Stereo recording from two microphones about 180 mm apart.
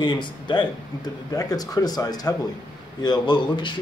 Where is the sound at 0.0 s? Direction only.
25° left (ahead or behind).